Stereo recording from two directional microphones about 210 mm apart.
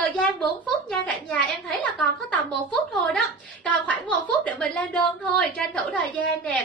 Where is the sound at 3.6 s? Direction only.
5° left (ahead or behind).